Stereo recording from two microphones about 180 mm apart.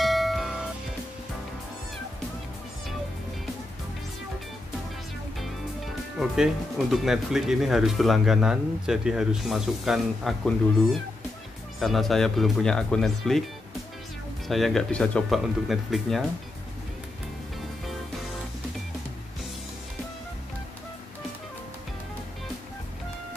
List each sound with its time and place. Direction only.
0.0 s music: centre (ahead or behind)
6.1 s speech: centre (ahead or behind)
14.5 s speech: centre (ahead or behind)